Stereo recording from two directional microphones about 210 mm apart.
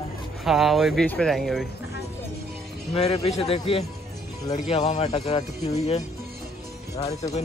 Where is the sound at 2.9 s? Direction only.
30° left (ahead or behind).